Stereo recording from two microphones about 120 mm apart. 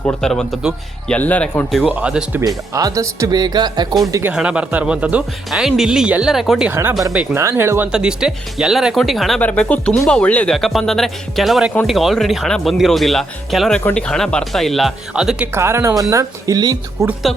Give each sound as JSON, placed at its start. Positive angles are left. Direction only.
{"t": 0.0, "sound": "speech", "side_deg": 10}
{"t": 1.7, "sound": "a man's voice", "side_deg": -10}
{"t": 2.7, "sound": "speech", "side_deg": -30}
{"t": 4.4, "sound": "a man's voice", "side_deg": -10}
{"t": 6.7, "sound": "a man's voice", "side_deg": -20}
{"t": 7.3, "sound": "speech", "side_deg": -20}
{"t": 7.9, "sound": "speech", "side_deg": -5}
{"t": 9.4, "sound": "speech", "side_deg": 10}
{"t": 15.5, "sound": "speech", "side_deg": -20}
{"t": 17.3, "sound": "speech", "side_deg": 5}